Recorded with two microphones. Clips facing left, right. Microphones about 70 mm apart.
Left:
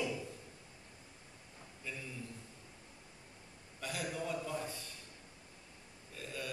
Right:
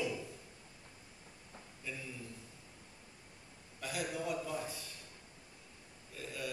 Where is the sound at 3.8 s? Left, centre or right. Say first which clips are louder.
Right 1 dB; centre.